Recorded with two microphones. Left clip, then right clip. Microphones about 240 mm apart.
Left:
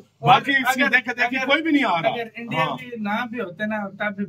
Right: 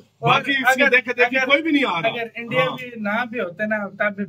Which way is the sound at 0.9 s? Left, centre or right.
Centre.